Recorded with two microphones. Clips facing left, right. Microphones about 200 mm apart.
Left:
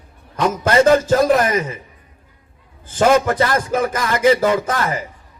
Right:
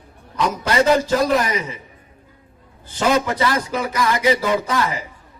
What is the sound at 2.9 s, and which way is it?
A man's voice, 50° left (ahead or behind).